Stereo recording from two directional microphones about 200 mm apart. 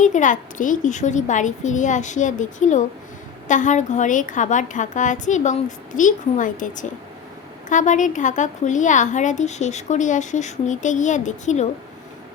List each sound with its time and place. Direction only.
0.0 s a woman's voice: 40° left (ahead or behind)